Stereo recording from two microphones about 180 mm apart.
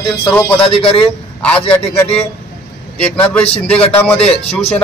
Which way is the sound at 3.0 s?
5° left (ahead or behind).